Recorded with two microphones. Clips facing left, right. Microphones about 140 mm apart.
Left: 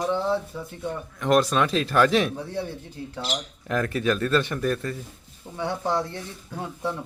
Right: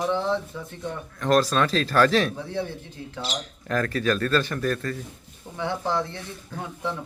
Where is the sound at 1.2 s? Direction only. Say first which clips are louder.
Even; 20° left (ahead or behind).